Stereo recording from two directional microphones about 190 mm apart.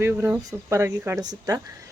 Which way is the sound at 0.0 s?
10° right (ahead or behind).